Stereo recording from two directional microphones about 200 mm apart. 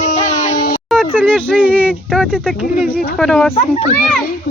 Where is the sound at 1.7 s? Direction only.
5° left (ahead or behind).